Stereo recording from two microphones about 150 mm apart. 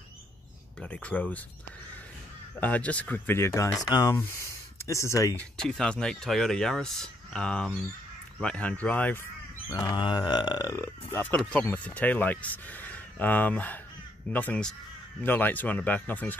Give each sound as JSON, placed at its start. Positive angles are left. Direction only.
{"t": 0.7, "sound": "speech", "side_deg": 10}
{"t": 2.6, "sound": "speech", "side_deg": 10}
{"t": 5.4, "sound": "speech", "side_deg": 5}
{"t": 9.8, "sound": "speech", "side_deg": 30}